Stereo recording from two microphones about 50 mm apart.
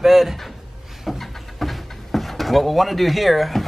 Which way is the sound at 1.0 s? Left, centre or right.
Centre.